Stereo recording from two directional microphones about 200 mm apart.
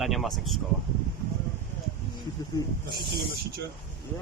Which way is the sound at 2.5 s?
20° left (ahead or behind).